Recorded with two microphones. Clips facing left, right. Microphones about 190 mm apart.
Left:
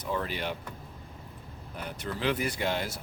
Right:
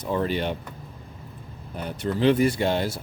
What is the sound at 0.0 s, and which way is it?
Speech, 30° right (ahead or behind).